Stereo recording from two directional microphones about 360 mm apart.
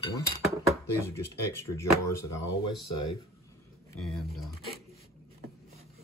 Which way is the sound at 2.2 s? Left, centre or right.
Left.